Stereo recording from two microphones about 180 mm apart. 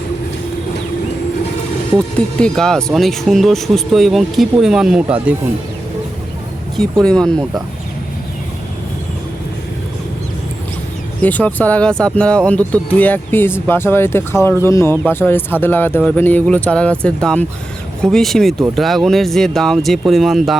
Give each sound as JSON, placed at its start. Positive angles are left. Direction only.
{"t": 2.0, "sound": "speech", "side_deg": 5}
{"t": 7.0, "sound": "speech", "side_deg": 5}
{"t": 11.2, "sound": "speech", "side_deg": 10}